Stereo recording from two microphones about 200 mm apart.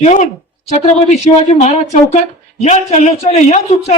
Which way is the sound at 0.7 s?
35° left (ahead or behind).